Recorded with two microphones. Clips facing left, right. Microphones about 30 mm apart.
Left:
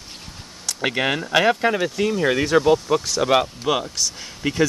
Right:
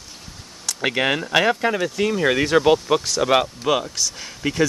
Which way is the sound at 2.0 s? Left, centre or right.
Centre.